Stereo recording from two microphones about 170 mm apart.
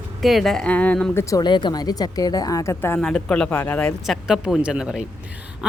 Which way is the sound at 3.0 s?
5° left (ahead or behind).